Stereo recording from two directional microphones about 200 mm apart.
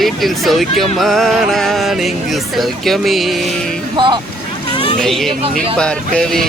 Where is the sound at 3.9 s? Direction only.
25° right (ahead or behind).